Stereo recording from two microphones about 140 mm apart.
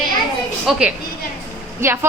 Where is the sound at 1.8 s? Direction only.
15° right (ahead or behind).